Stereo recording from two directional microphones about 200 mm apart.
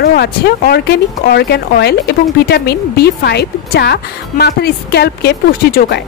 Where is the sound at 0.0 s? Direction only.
55° left (ahead or behind).